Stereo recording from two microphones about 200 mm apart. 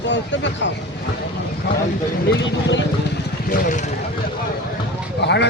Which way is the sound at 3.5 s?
45° left (ahead or behind).